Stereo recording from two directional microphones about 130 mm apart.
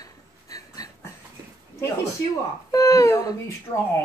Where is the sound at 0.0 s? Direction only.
30° left (ahead or behind).